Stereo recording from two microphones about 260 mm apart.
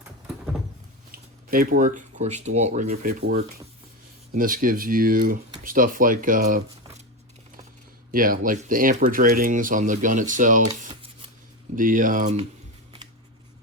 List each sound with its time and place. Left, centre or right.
1.1 s speech: right
8.1 s speech: right
10.8 s scissors: right
11.7 s speech: right